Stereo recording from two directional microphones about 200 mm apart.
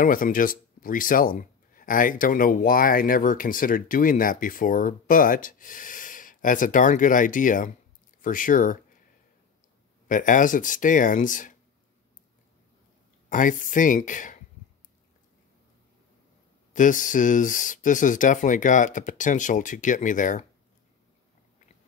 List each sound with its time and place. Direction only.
0.0 s speech: 45° left (ahead or behind)
10.0 s speech: 40° left (ahead or behind)
13.3 s speech: 40° left (ahead or behind)
16.7 s speech: 40° left (ahead or behind)